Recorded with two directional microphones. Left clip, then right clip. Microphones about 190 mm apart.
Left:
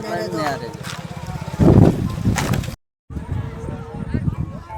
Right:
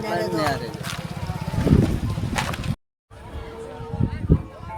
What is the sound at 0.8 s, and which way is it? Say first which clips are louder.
Vehicle: even; 30° right (ahead or behind).